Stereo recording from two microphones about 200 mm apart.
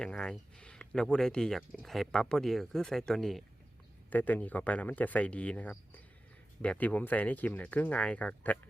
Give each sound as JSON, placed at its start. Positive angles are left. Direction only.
{"t": 0.0, "sound": "speech", "side_deg": 5}